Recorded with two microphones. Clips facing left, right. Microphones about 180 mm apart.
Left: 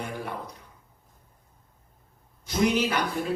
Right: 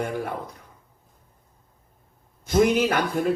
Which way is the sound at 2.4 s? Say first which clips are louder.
Right 5 dB; 50° right (ahead or behind).